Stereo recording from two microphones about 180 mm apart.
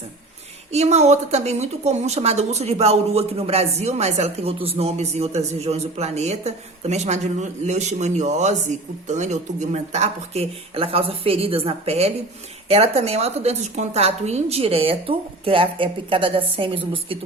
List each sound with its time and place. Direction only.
0.7 s speech: 40° right (ahead or behind)